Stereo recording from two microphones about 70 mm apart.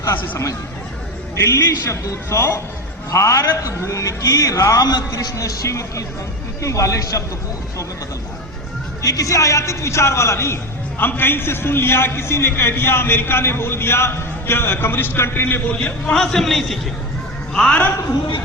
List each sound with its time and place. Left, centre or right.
0.0 s a man's voice: left
5.1 s a man's voice: left
9.0 s a man's voice: left
15.7 s a man's voice: centre
17.5 s a man's voice: centre